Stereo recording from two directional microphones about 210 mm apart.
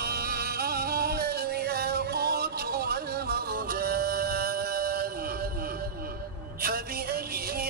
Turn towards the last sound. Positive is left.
turn(degrees=-45)  # may be behind; listen again after turning